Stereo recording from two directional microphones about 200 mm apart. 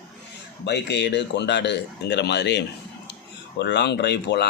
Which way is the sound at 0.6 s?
60° left (ahead or behind).